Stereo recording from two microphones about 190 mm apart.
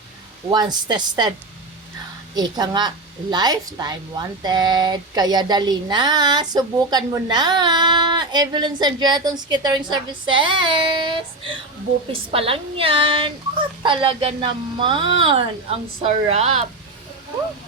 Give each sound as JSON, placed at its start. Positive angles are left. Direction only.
{"t": 0.5, "sound": "a woman's voice", "side_deg": -20}
{"t": 2.3, "sound": "a woman's voice", "side_deg": -20}